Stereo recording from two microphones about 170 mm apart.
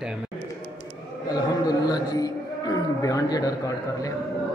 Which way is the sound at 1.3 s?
20° left (ahead or behind).